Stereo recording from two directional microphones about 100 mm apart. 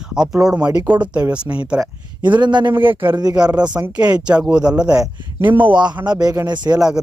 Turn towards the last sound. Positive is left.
turn(degrees=-45)  # may be behind; listen again after turning